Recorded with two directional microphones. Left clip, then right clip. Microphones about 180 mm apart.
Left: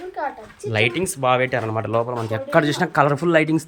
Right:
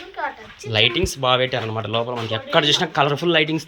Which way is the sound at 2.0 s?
35° left (ahead or behind).